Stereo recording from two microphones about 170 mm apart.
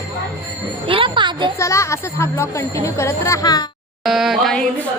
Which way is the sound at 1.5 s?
15° left (ahead or behind).